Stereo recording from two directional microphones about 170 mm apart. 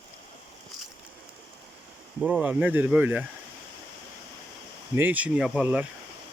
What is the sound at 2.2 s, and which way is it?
Speech, 5° right (ahead or behind).